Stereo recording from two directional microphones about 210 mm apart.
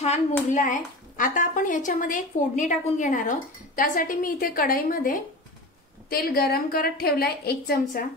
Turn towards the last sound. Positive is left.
turn(degrees=45)  # may be behind; listen again after turning